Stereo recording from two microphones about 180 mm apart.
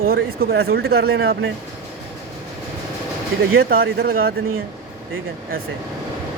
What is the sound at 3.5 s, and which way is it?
Speech, 60° right (ahead or behind).